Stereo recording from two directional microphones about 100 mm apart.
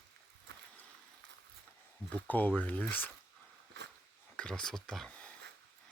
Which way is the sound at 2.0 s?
15° left (ahead or behind).